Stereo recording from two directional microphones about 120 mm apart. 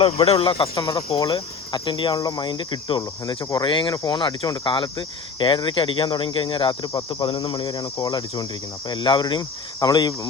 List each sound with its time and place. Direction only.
0.3 s speech: 50° left (ahead or behind); by 10.2 s 35° left (ahead or behind)